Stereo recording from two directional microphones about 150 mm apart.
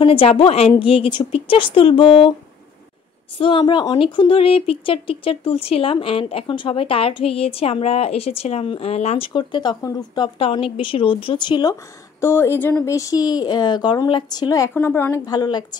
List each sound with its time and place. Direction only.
0.0 s speech: 35° left (ahead or behind)
3.3 s speech: 35° left (ahead or behind)
9.3 s speech: 30° left (ahead or behind)
12.2 s speech: 15° left (ahead or behind)